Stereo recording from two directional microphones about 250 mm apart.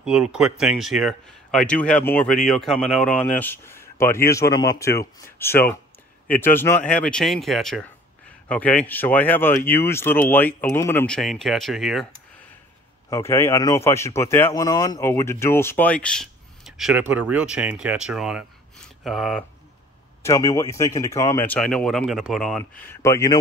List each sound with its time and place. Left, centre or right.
0.0 s speech: centre
13.1 s speech: centre
20.2 s speech: centre